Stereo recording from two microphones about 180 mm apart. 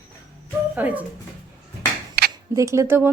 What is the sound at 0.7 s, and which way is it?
Speech, 10° right (ahead or behind).